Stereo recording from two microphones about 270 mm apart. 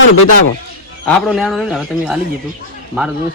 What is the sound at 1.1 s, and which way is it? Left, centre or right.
A man's voice, centre.